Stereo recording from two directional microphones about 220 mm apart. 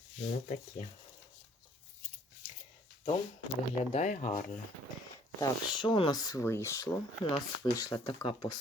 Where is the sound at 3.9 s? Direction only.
35° left (ahead or behind).